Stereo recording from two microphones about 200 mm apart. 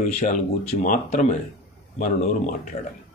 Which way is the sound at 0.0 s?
35° left (ahead or behind).